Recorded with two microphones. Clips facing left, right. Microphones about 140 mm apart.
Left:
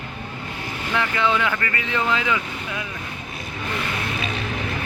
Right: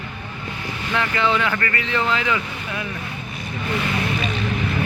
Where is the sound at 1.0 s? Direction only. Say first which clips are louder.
Right 1 dB; 15° left (ahead or behind).